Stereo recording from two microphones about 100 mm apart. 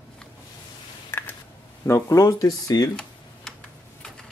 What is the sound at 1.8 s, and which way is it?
Speech, 25° left (ahead or behind).